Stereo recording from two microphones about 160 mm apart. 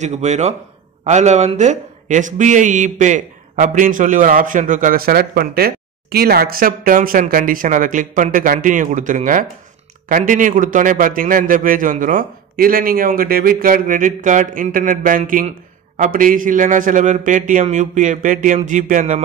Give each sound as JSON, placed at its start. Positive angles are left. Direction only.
{"t": 0.0, "sound": "a man's voice", "side_deg": -45}